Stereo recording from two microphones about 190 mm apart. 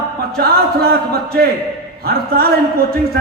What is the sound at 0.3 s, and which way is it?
A man's voice, 55° right (ahead or behind).